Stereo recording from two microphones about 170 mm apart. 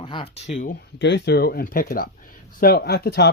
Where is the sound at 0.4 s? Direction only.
50° left (ahead or behind).